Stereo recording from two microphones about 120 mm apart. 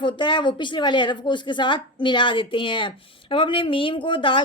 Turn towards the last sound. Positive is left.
turn(degrees=45)  # may be behind; listen again after turning